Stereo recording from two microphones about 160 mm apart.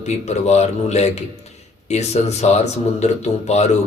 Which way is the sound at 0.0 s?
45° left (ahead or behind).